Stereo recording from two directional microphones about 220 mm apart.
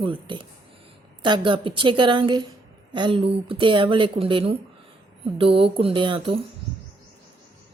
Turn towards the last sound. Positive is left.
turn(degrees=-25)  # may be behind; listen again after turning